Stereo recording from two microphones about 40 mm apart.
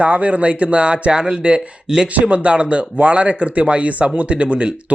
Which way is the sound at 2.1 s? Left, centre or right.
Right.